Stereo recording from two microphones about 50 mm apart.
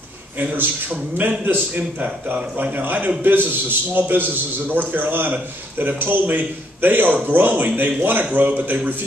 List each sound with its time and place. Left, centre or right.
0.4 s a man's voice: right